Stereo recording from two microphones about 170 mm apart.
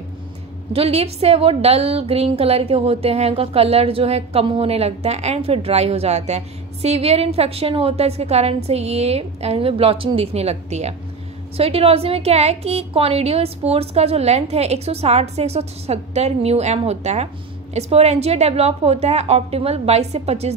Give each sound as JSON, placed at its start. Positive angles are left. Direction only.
{"t": 0.7, "sound": "a woman's voice", "side_deg": -35}